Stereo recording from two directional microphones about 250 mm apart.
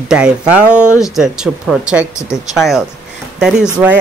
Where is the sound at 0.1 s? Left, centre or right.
Centre.